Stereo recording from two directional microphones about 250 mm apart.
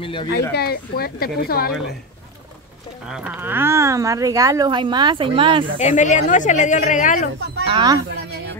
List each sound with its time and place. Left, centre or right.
0.0 s a woman's voice: centre
0.5 s speech: left
3.1 s speech: centre; by 5.7 s right
5.8 s a woman's voice: left
7.6 s speech: centre